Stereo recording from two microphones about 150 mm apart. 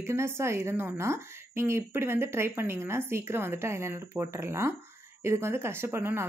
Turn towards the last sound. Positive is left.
turn(degrees=-15)  # may be behind; listen again after turning